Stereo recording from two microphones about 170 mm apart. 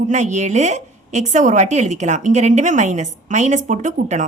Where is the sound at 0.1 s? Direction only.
45° right (ahead or behind).